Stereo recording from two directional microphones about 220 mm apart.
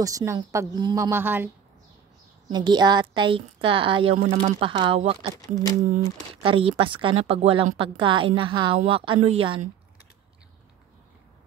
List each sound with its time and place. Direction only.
0.0 s a woman's voice: 15° right (ahead or behind)